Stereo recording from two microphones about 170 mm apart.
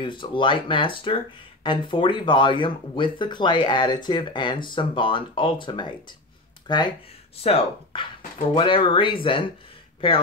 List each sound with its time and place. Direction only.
0.0 s speech: 30° left (ahead or behind)